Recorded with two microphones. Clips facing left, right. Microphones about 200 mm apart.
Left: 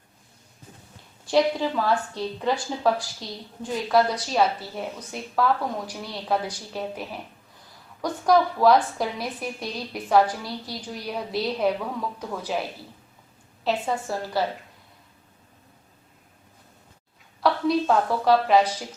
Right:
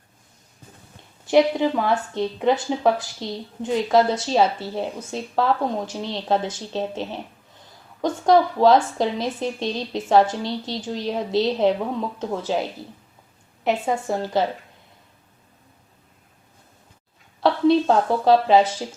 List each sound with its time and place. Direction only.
1.2 s a woman's voice: 20° right (ahead or behind)
13.7 s a woman's voice: 25° right (ahead or behind)
17.4 s a woman's voice: 30° right (ahead or behind)